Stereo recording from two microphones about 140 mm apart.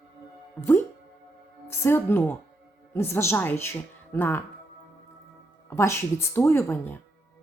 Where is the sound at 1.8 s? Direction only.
15° left (ahead or behind).